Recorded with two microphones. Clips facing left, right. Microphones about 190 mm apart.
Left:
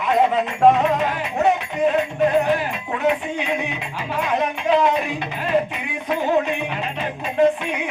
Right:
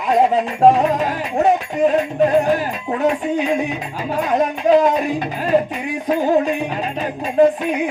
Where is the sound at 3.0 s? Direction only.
40° right (ahead or behind).